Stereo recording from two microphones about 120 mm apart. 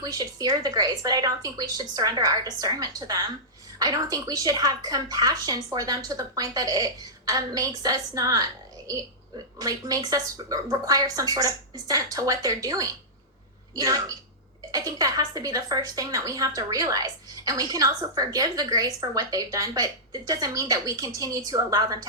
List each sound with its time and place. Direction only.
0.0 s speech: 30° right (ahead or behind)
9.6 s speech: 30° right (ahead or behind)